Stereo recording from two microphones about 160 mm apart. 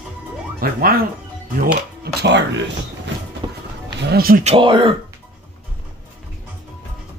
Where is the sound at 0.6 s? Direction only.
65° right (ahead or behind).